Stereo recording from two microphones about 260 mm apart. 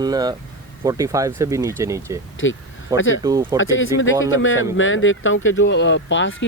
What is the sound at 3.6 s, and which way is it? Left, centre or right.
Speech, left.